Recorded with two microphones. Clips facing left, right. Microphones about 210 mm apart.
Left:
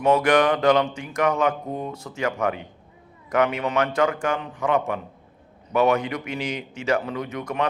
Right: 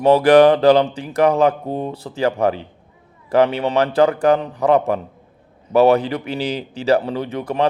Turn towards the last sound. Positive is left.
turn(degrees=-30)  # may be behind; listen again after turning